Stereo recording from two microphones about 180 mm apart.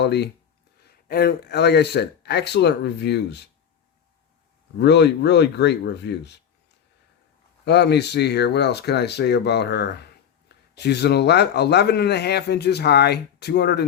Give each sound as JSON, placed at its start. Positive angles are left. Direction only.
{"t": 0.0, "sound": "speech", "side_deg": 70}
{"t": 0.9, "sound": "speech", "side_deg": 55}
{"t": 4.8, "sound": "speech", "side_deg": 70}
{"t": 7.6, "sound": "speech", "side_deg": 70}